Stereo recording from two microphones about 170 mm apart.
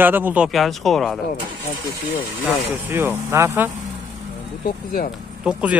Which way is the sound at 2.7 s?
15° right (ahead or behind).